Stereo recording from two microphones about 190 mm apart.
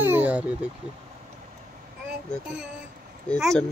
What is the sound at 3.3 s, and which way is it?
Speech, 5° left (ahead or behind).